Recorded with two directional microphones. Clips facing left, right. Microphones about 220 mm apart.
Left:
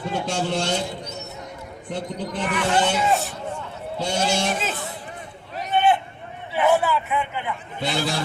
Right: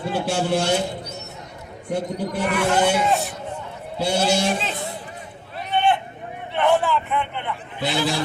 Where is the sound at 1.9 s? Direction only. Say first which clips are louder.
Right 4 dB; 10° right (ahead or behind).